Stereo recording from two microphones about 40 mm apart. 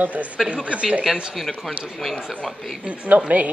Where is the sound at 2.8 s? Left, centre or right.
Right.